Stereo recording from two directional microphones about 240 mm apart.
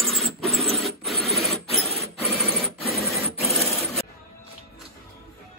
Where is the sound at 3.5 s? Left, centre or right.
Centre.